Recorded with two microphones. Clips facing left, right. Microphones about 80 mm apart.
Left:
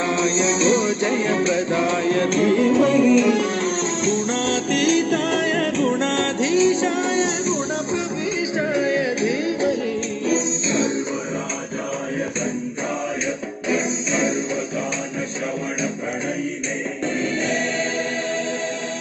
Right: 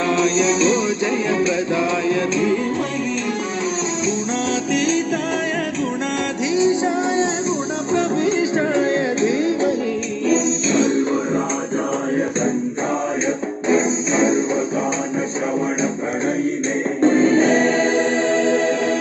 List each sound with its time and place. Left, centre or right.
0.1 s music: left
2.4 s music: left
2.8 s music: centre
4.7 s music: left
6.5 s music: centre
8.4 s music: right
10.8 s music: right
13.7 s music: right
17.0 s music: right